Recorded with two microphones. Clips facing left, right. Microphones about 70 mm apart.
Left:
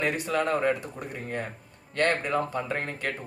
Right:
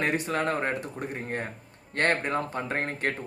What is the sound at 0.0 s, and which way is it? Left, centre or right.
A man's voice, right.